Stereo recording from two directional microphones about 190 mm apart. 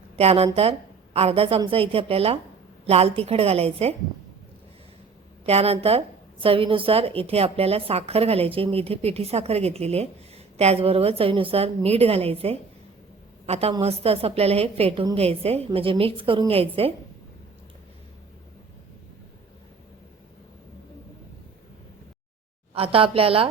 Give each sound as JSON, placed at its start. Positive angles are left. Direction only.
{"t": 0.2, "sound": "a woman's voice", "side_deg": -30}
{"t": 5.5, "sound": "a woman's voice", "side_deg": -30}
{"t": 22.7, "sound": "a woman's voice", "side_deg": -30}